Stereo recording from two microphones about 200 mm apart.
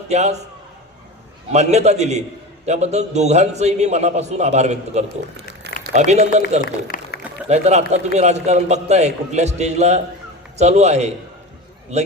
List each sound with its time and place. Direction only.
0.1 s a man's voice: 35° right (ahead or behind)
1.5 s a man's voice: 35° right (ahead or behind)
6.6 s a man's voice: 45° left (ahead or behind)
7.4 s a man's voice: 35° right (ahead or behind)